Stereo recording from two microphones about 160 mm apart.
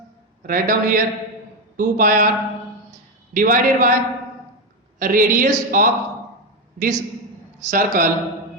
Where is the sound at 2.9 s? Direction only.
55° right (ahead or behind).